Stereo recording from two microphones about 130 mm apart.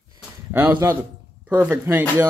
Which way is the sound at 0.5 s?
15° right (ahead or behind).